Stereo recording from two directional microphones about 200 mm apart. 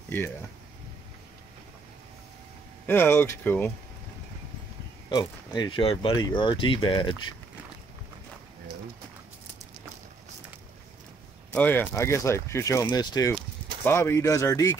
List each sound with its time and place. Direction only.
2.9 s speech: 10° left (ahead or behind)
5.1 s speech: 20° left (ahead or behind)
11.5 s speech: 10° left (ahead or behind)